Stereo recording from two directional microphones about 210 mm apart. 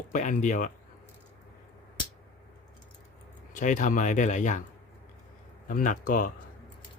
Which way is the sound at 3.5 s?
35° left (ahead or behind).